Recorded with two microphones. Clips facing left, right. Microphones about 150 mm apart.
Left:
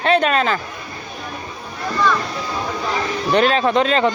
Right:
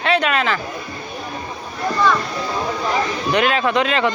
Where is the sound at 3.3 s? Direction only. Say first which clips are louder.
Left 2 dB; 35° left (ahead or behind).